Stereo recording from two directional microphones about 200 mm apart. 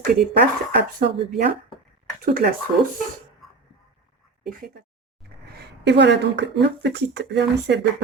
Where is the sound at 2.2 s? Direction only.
45° right (ahead or behind).